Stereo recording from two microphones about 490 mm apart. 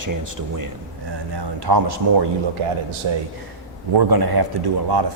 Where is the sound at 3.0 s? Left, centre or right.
Right.